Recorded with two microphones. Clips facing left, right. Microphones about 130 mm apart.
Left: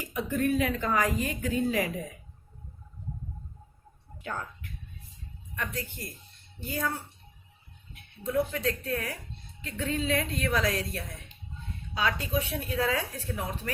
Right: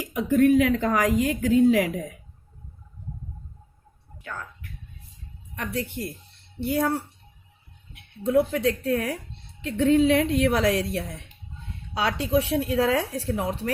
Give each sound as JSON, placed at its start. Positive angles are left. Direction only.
{"t": 0.0, "sound": "a woman's voice", "side_deg": -90}
{"t": 4.2, "sound": "speech", "side_deg": 30}
{"t": 5.7, "sound": "a woman's voice", "side_deg": -75}